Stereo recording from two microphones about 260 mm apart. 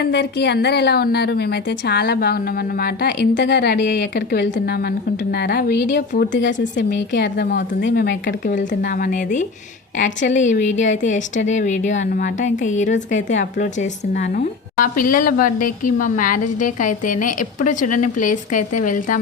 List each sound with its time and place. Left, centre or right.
0.0 s a woman's voice: left
5.5 s a woman's voice: left